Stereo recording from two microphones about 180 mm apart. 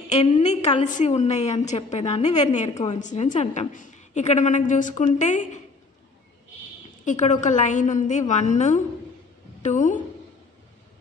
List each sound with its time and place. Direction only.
0.1 s a woman's voice: 40° left (ahead or behind)
7.1 s a woman's voice: 40° left (ahead or behind)